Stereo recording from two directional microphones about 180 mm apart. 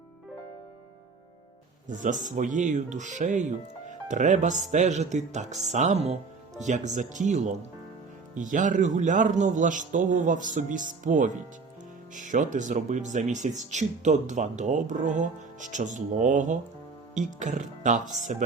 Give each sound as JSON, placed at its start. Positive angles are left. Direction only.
{"t": 1.9, "sound": "speech", "side_deg": -45}